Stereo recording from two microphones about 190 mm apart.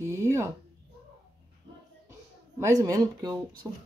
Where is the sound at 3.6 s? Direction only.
Centre (ahead or behind).